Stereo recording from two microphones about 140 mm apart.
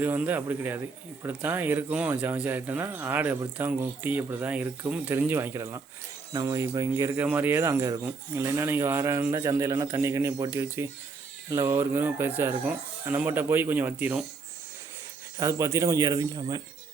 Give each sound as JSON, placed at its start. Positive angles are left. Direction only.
{"t": 0.0, "sound": "speech", "side_deg": -10}
{"t": 7.2, "sound": "speech", "side_deg": -10}
{"t": 15.4, "sound": "speech", "side_deg": -20}